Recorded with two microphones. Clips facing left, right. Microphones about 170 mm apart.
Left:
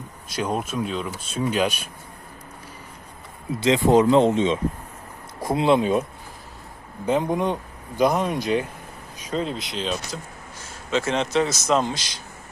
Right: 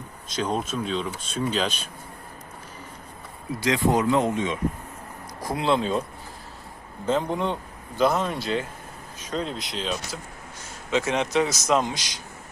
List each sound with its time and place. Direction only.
0.3 s speech: 10° left (ahead or behind)
3.6 s speech: 25° left (ahead or behind); by 10.2 s centre (ahead or behind)
10.9 s a man's voice: 15° right (ahead or behind)